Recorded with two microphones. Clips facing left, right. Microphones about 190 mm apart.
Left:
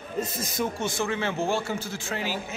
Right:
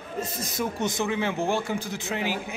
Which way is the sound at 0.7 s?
20° right (ahead or behind).